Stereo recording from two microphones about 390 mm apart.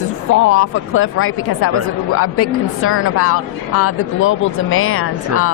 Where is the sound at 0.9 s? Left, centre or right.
Left.